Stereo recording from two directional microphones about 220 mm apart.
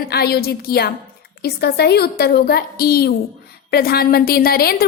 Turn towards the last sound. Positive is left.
turn(degrees=45)  # may be behind; listen again after turning